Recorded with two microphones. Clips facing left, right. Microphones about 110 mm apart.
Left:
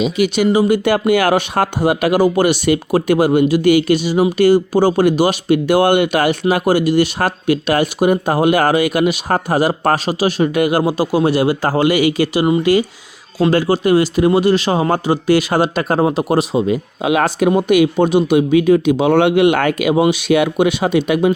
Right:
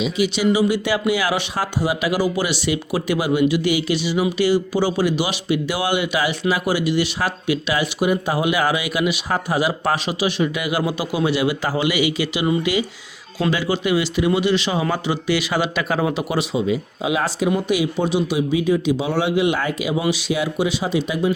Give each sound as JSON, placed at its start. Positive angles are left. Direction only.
{"t": 0.0, "sound": "speech", "side_deg": 50}